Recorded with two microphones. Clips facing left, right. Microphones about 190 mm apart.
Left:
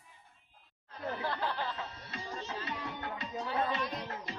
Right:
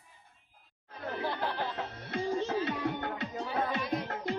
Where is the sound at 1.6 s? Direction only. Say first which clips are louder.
Right 3 dB; 60° right (ahead or behind).